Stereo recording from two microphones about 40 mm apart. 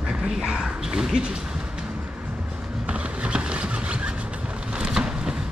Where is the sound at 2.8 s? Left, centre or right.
Right.